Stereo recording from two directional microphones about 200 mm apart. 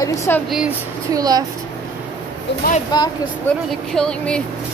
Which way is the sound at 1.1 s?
20° right (ahead or behind).